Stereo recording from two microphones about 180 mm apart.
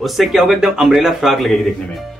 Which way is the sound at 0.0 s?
Centre (ahead or behind).